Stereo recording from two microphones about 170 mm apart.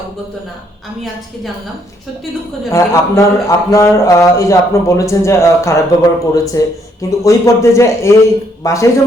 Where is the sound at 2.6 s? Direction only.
20° left (ahead or behind).